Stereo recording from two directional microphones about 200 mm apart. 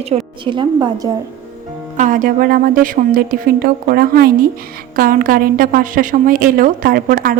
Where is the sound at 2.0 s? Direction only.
40° right (ahead or behind).